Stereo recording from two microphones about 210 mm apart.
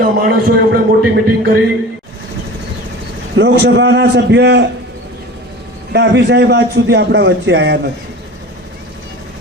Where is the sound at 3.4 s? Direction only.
55° right (ahead or behind).